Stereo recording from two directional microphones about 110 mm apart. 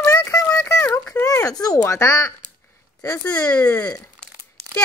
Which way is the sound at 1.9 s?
25° left (ahead or behind).